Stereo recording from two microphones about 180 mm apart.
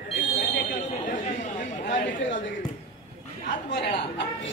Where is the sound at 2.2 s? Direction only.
90° left.